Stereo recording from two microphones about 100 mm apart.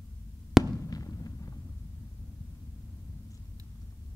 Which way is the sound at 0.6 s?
35° left (ahead or behind).